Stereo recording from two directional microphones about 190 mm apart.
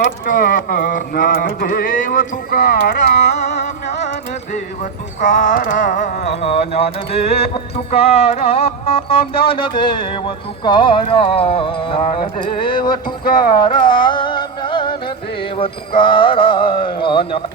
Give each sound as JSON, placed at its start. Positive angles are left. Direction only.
{"t": 0.3, "sound": "a sound", "side_deg": 50}
{"t": 3.5, "sound": "music", "side_deg": 65}
{"t": 4.5, "sound": "a sound", "side_deg": 40}
{"t": 6.3, "sound": "music", "side_deg": 35}
{"t": 9.5, "sound": "speech", "side_deg": 25}
{"t": 13.4, "sound": "music", "side_deg": 25}
{"t": 16.0, "sound": "speech", "side_deg": 25}